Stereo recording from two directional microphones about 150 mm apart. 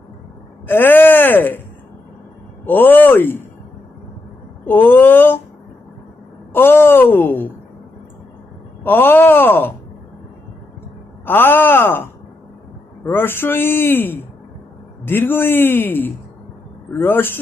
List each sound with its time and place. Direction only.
0.7 s speech: 15° left (ahead or behind)
2.6 s speech: 10° left (ahead or behind)
4.6 s speech: 15° left (ahead or behind)
6.5 s speech: 15° left (ahead or behind)
8.8 s speech: 15° left (ahead or behind)
11.3 s speech: 15° left (ahead or behind)
13.1 s speech: 15° left (ahead or behind)